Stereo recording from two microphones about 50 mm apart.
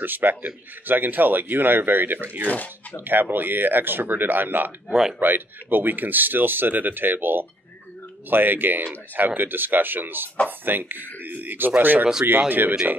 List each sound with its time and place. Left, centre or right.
0.0 s speech: right
2.4 s speech: left
3.0 s speech: right